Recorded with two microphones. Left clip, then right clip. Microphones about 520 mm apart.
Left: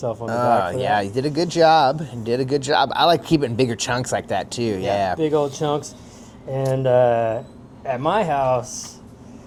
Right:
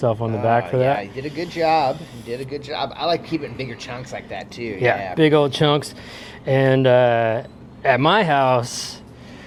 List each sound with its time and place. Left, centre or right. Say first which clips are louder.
0.0 s speech: right 5 dB; right
0.3 s speech: left 3 dB; left
5.1 s speech: right 4 dB; right